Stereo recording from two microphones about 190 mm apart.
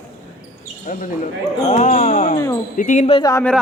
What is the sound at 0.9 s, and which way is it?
Speech, 45° left (ahead or behind).